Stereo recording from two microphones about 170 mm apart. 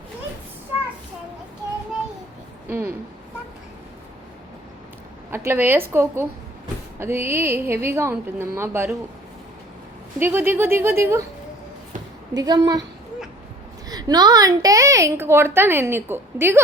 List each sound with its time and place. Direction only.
2.6 s a sound: 15° right (ahead or behind)
5.3 s a woman's voice: 15° right (ahead or behind)
10.2 s a woman's voice: 15° right (ahead or behind)
12.3 s a woman's voice: 25° right (ahead or behind)
13.8 s a woman's voice: 25° right (ahead or behind)